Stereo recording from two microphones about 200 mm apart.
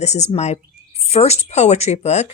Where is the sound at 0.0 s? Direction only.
35° left (ahead or behind).